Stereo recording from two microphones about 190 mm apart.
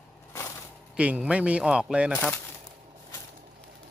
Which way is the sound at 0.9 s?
5° right (ahead or behind).